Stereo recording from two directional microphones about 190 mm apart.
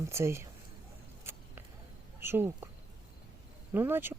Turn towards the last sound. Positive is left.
turn(degrees=-10)  # may be behind; listen again after turning